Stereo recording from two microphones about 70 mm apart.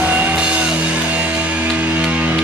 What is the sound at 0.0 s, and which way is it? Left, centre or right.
Music, right.